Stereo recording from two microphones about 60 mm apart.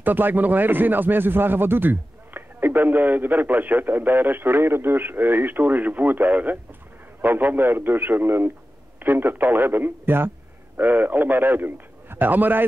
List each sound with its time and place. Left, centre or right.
0.0 s speech: right